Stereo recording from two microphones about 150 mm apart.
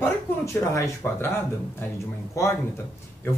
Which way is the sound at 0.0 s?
20° left (ahead or behind).